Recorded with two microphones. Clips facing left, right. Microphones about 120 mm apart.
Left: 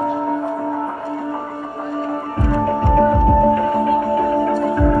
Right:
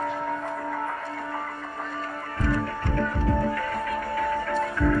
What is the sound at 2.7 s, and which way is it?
Music, 30° left (ahead or behind).